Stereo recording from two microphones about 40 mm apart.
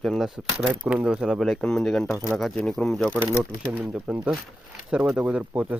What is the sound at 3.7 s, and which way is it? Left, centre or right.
Speech, right.